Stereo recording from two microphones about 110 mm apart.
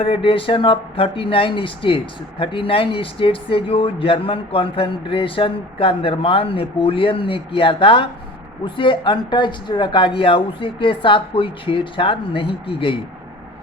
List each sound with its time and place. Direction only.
0.0 s speech: 55° left (ahead or behind)